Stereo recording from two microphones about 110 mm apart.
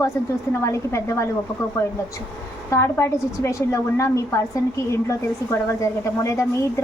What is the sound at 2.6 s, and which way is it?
A woman's voice, 25° left (ahead or behind).